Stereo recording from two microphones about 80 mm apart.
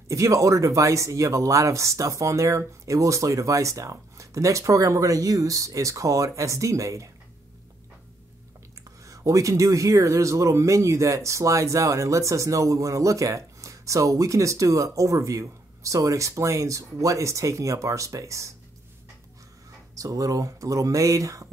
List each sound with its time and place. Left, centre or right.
0.1 s a man's voice: right
9.0 s a man's voice: right
20.0 s speech: right